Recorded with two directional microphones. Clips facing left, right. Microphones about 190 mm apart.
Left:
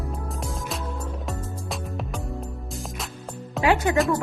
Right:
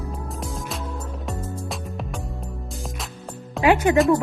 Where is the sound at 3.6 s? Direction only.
20° right (ahead or behind).